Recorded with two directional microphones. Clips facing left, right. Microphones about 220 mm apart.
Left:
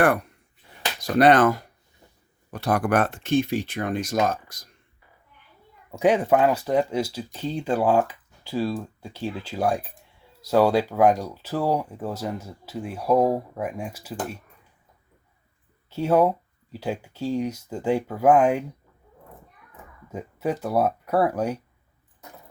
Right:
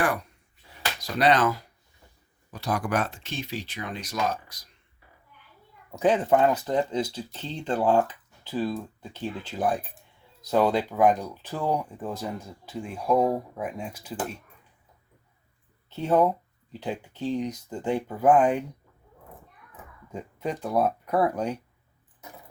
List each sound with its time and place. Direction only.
1.0 s speech: 50° left (ahead or behind)
5.9 s speech: 10° left (ahead or behind)
15.9 s speech: 10° left (ahead or behind)
20.1 s speech: 5° left (ahead or behind)